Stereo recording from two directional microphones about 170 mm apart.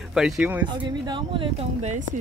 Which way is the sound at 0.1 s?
5° right (ahead or behind).